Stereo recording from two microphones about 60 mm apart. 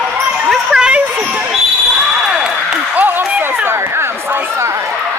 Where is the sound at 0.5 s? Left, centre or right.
Centre.